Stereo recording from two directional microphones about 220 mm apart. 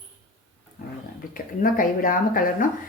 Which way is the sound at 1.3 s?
40° left (ahead or behind).